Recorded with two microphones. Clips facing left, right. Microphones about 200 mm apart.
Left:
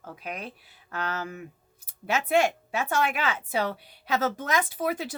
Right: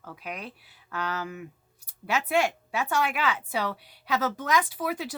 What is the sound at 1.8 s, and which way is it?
Speech, 25° left (ahead or behind).